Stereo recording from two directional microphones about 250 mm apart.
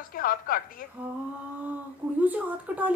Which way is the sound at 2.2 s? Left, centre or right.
Centre.